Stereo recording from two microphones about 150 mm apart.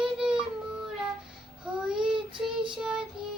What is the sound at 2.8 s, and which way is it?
Child singing, 5° right (ahead or behind).